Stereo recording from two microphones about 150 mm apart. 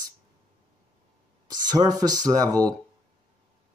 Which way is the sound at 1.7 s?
25° right (ahead or behind).